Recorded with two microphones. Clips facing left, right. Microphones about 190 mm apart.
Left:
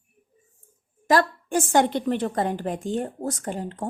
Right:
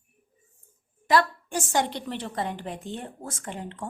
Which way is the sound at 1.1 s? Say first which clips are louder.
Left 2 dB; 50° left (ahead or behind).